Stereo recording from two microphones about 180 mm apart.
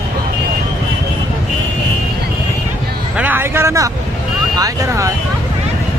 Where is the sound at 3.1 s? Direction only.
10° right (ahead or behind).